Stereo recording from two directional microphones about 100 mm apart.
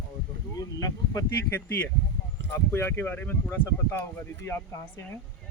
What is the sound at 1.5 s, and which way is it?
Speech, 20° left (ahead or behind).